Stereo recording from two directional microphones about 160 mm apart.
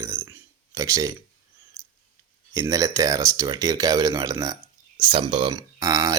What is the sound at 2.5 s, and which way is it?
Speech, 20° right (ahead or behind).